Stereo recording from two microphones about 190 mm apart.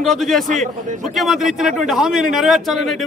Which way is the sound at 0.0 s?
Centre (ahead or behind).